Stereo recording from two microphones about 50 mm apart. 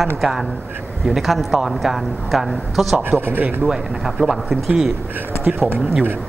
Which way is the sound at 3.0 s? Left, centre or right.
Right.